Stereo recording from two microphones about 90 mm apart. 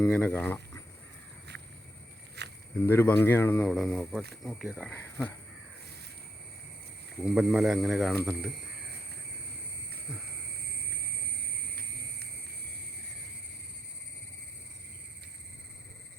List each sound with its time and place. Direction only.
0.0 s speech: 15° left (ahead or behind)
2.8 s speech: 25° left (ahead or behind)
3.6 s speech: 5° left (ahead or behind)
4.9 s speech: 25° left (ahead or behind)
7.2 s speech: 5° right (ahead or behind)